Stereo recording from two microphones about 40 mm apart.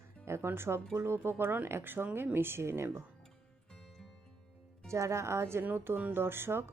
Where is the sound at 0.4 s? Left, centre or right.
Right.